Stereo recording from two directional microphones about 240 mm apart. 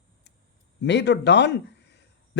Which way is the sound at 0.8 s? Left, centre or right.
Left.